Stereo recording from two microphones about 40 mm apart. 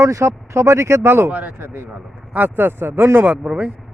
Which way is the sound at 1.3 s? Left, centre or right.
Right.